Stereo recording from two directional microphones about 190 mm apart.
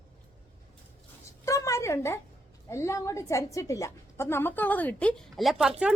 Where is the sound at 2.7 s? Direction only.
15° left (ahead or behind); by 5.7 s centre (ahead or behind).